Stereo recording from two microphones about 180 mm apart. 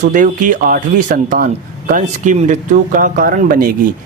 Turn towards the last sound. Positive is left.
turn(degrees=-50)  # may be behind; listen again after turning